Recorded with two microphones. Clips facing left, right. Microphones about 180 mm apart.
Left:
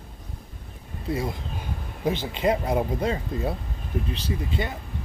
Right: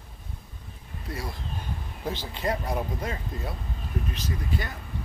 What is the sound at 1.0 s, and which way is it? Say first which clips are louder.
Speech: left 8 dB; 20° left (ahead or behind).